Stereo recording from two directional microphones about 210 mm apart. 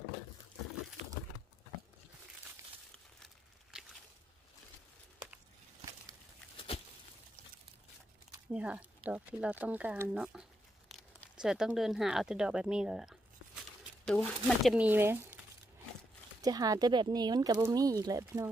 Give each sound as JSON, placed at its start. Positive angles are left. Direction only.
{"t": 3.7, "sound": "a sound", "side_deg": -5}
{"t": 8.5, "sound": "speech", "side_deg": -5}
{"t": 16.3, "sound": "speech", "side_deg": -15}